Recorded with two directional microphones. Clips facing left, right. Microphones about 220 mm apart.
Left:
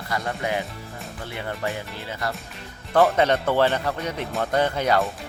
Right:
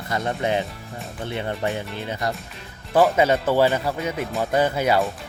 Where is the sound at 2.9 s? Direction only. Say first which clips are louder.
Right 1 dB; 5° right (ahead or behind).